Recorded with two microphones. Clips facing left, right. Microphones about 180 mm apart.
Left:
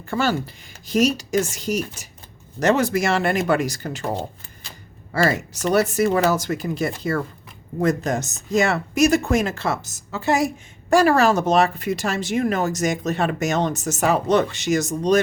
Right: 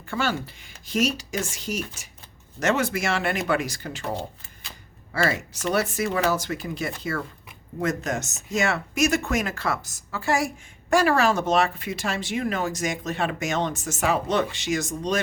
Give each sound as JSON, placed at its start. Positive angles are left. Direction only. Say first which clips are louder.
{"t": 0.1, "sound": "speech", "louder": "left 5 dB", "side_deg": 40}
{"t": 5.1, "sound": "speech", "louder": "left 4 dB", "side_deg": 40}
{"t": 10.8, "sound": "speech", "louder": "left 4 dB", "side_deg": 35}